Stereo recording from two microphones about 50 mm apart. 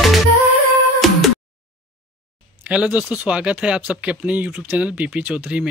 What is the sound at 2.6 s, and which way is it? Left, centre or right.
Speech, right.